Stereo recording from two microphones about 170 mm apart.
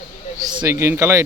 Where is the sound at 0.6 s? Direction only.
15° right (ahead or behind).